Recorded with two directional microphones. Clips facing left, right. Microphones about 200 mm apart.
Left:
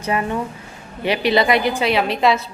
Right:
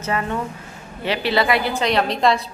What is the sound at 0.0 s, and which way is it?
A woman's voice, 15° left (ahead or behind).